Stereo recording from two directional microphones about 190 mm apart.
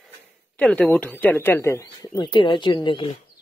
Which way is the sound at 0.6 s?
5° left (ahead or behind).